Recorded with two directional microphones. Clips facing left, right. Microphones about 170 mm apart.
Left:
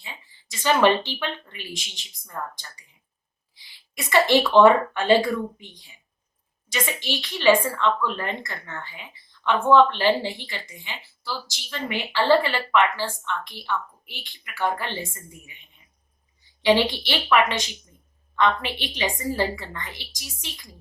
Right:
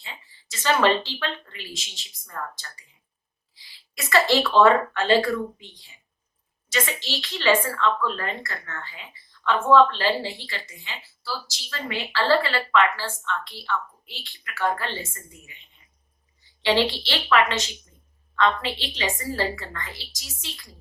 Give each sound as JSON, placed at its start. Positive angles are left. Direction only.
{"t": 0.5, "sound": "a woman's voice", "side_deg": 15}
{"t": 3.5, "sound": "speech", "side_deg": 20}
{"t": 6.8, "sound": "a woman's voice", "side_deg": 15}
{"t": 16.6, "sound": "a woman's voice", "side_deg": 15}